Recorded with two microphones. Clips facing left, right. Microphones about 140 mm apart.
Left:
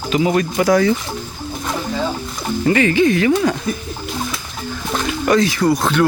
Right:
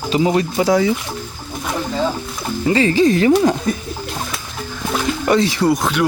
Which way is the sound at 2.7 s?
25° right (ahead or behind).